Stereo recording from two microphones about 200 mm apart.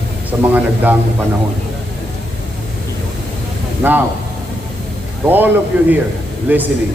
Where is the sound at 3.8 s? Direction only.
10° right (ahead or behind).